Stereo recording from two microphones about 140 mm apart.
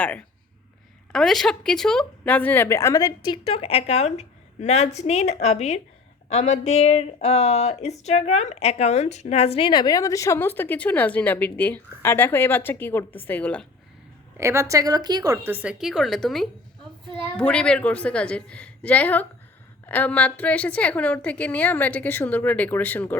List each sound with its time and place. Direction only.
0.0 s a woman's voice: 10° left (ahead or behind); by 3.4 s 30° left (ahead or behind)
3.4 s a woman's voice: 45° left (ahead or behind); by 13.7 s 10° left (ahead or behind)
14.3 s a woman's voice: 20° right (ahead or behind)
15.4 s speech: 15° right (ahead or behind)
15.8 s a woman's voice: centre (ahead or behind)